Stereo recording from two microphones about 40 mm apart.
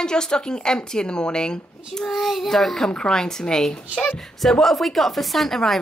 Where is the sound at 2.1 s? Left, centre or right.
Centre.